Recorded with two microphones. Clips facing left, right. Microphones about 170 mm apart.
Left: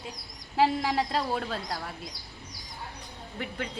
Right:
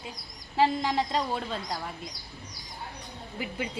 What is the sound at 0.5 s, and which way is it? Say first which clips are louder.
Speech: even; 5° left (ahead or behind).